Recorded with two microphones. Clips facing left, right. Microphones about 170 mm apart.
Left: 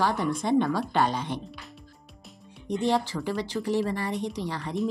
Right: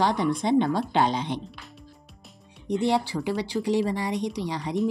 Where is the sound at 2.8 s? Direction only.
15° right (ahead or behind).